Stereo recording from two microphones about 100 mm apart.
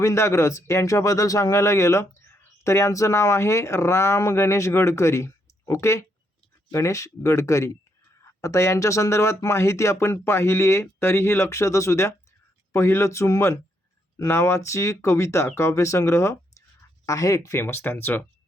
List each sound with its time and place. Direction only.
0.0 s speech: 30° left (ahead or behind)